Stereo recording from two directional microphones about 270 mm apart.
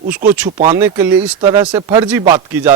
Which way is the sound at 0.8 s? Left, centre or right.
Centre.